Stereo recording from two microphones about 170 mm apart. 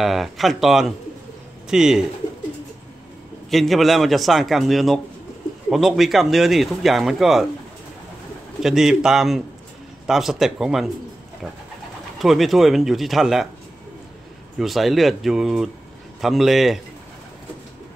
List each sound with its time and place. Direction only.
0.0 s speech: centre (ahead or behind)
3.4 s speech: centre (ahead or behind)
8.6 s speech: 5° right (ahead or behind)
12.2 s speech: centre (ahead or behind)
14.6 s speech: centre (ahead or behind)